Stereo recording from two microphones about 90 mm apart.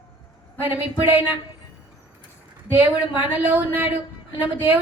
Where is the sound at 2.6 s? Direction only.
20° right (ahead or behind).